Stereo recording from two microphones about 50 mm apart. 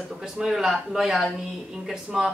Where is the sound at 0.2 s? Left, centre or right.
Centre.